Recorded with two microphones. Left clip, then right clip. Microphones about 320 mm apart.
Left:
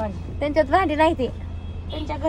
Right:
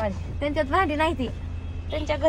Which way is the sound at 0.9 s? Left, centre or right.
Left.